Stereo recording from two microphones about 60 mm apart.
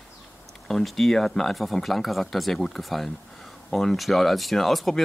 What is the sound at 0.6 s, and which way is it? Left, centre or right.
Speech, centre.